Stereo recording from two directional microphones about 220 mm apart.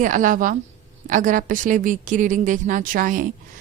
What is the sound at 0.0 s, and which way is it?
A woman's voice, 35° right (ahead or behind).